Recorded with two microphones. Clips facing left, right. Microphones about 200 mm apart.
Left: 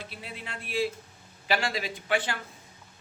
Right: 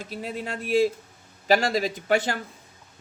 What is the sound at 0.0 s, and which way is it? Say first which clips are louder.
A man's voice: right 9 dB; 40° right (ahead or behind).